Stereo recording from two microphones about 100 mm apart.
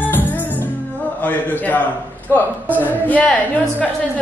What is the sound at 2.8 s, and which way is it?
Speech, 15° left (ahead or behind).